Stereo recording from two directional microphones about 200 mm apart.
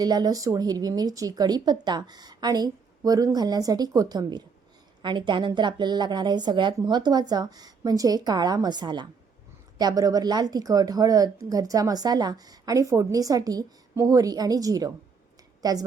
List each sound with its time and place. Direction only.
0.0 s a woman's voice: 20° right (ahead or behind)